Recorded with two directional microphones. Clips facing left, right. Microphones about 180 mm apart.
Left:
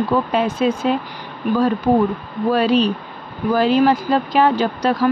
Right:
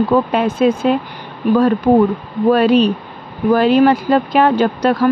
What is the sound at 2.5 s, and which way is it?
Speech, 60° right (ahead or behind).